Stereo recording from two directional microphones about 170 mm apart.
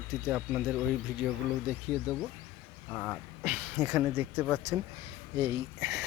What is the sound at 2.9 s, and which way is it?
Speech, 10° left (ahead or behind).